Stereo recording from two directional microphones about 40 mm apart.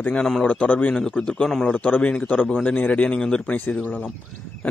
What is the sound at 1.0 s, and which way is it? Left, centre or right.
A man's voice, left.